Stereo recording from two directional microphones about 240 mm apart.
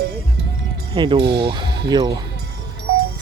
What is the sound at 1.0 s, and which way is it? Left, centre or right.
Speech, right.